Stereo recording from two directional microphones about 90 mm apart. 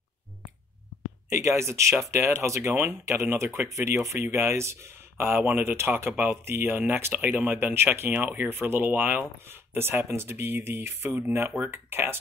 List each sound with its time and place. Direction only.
1.3 s speech: 30° right (ahead or behind)